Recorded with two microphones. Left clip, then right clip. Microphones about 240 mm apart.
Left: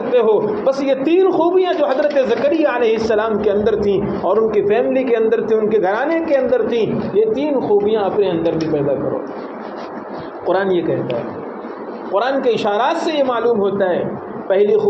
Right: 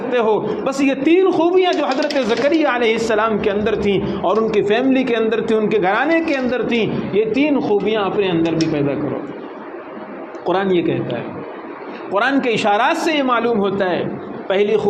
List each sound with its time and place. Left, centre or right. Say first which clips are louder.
0.1 s a man's voice: left 3 dB; right
10.4 s a man's voice: left 1 dB; right
12.1 s a man's voice: left 1 dB; right